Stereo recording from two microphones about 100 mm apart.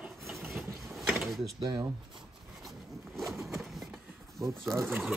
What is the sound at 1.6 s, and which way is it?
Speech, 40° right (ahead or behind).